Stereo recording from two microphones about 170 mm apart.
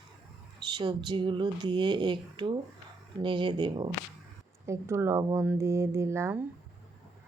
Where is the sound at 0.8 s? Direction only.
25° right (ahead or behind).